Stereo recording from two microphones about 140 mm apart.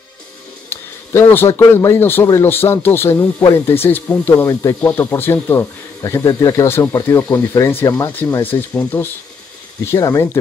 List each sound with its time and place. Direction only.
0.7 s speech: 15° left (ahead or behind)
9.8 s speech: 25° left (ahead or behind)